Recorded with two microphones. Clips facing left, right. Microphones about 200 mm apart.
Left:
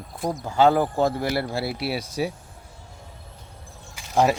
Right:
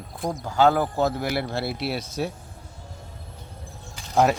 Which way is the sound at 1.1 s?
Centre (ahead or behind).